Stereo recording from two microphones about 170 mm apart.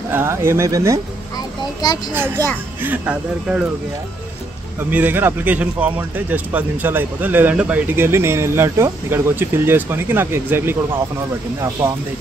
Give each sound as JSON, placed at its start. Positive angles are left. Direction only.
{"t": 0.1, "sound": "speech", "side_deg": -15}
{"t": 2.1, "sound": "speech", "side_deg": -10}
{"t": 4.7, "sound": "speech", "side_deg": -10}